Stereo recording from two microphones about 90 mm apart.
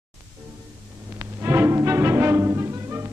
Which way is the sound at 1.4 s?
25° right (ahead or behind).